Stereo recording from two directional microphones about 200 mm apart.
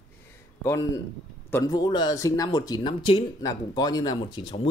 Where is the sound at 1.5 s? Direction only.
20° left (ahead or behind).